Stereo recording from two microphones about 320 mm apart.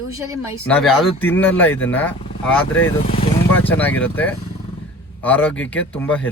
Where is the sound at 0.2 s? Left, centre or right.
Centre.